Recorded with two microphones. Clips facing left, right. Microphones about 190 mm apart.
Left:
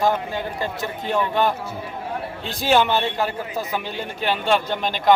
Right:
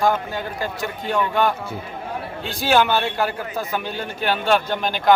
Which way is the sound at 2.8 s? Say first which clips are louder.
Right 1 dB; 25° left (ahead or behind).